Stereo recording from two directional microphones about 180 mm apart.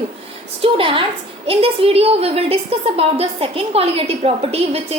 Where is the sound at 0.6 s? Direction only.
30° right (ahead or behind).